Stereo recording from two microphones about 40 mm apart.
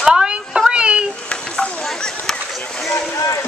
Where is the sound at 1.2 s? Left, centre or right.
Left.